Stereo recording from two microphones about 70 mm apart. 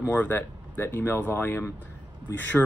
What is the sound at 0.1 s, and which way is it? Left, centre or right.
Speech, left.